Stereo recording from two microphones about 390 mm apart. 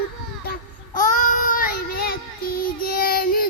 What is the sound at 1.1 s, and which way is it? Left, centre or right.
Child singing, centre.